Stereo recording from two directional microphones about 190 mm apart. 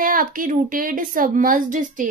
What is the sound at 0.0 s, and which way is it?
A woman's voice, 45° right (ahead or behind).